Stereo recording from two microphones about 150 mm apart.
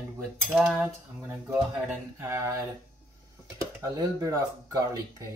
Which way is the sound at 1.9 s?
15° right (ahead or behind).